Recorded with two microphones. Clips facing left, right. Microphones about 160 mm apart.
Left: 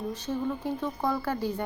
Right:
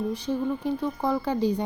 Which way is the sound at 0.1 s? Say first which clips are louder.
Right 4 dB; 15° right (ahead or behind).